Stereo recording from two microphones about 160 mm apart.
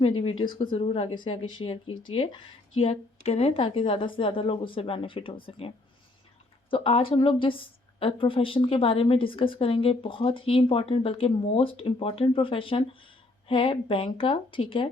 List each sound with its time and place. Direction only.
0.0 s a woman's voice: 35° left (ahead or behind)